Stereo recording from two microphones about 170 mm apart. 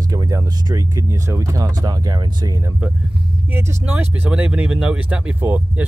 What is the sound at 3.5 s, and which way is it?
Speech, 10° right (ahead or behind).